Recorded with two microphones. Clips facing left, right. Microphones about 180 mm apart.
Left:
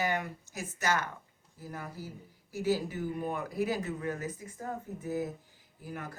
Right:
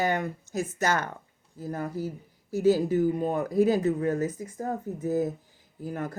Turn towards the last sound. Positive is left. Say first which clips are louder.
# right 9 dB
turn(degrees=-45)  # may be behind; listen again after turning